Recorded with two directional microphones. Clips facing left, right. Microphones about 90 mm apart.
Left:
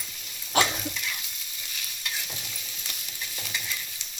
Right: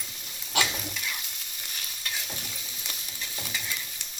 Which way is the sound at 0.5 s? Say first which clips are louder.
Left 4 dB; 40° left (ahead or behind).